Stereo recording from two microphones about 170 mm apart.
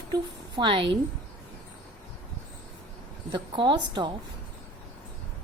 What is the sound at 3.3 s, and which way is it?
Speech, 30° right (ahead or behind).